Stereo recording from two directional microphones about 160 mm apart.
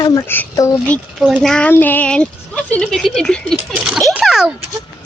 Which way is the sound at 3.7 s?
5° right (ahead or behind).